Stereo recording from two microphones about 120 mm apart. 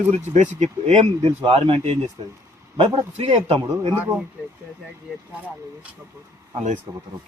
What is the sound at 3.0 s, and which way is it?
Speech, 55° right (ahead or behind).